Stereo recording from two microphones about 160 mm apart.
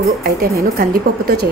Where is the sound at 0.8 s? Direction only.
70° right (ahead or behind).